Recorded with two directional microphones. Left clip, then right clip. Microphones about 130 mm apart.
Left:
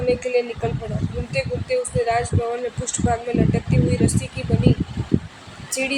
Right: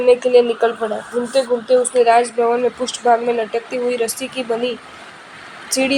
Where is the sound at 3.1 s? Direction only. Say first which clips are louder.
Right 10 dB; 45° right (ahead or behind).